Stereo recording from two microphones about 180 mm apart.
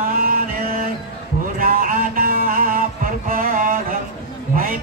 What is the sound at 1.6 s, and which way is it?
Music, 50° right (ahead or behind).